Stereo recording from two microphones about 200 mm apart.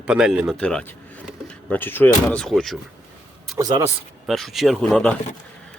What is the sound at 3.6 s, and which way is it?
Speech, 20° right (ahead or behind).